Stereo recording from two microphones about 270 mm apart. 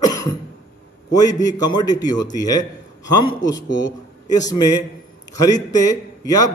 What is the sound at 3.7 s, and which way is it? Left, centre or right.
Speech, left.